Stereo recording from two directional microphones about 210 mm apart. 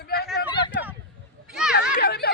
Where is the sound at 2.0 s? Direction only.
50° left (ahead or behind).